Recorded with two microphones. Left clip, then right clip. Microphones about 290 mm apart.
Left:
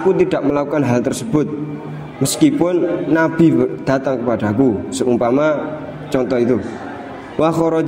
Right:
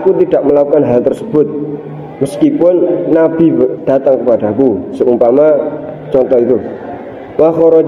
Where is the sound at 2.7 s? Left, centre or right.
Left.